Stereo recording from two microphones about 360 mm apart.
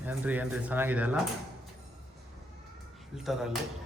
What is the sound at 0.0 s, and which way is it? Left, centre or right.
Speech, centre.